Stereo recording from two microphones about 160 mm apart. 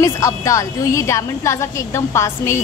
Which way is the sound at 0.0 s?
20° left (ahead or behind).